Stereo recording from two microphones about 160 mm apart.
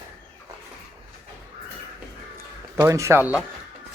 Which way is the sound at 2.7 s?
20° right (ahead or behind).